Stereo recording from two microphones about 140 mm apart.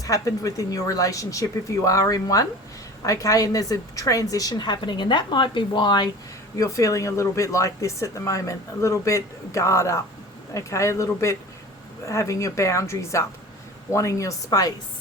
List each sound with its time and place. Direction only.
0.0 s speech: 25° left (ahead or behind)